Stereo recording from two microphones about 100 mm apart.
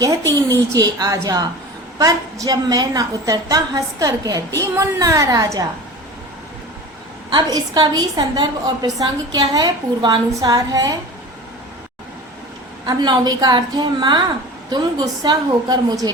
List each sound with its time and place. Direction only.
0.0 s a woman's voice: 30° right (ahead or behind)
7.5 s a woman's voice: 40° right (ahead or behind)
12.8 s a woman's voice: 45° right (ahead or behind)